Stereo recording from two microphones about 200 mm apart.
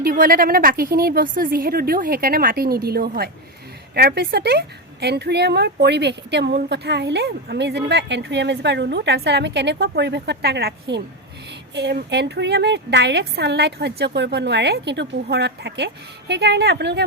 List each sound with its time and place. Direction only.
0.0 s a woman's voice: 45° right (ahead or behind)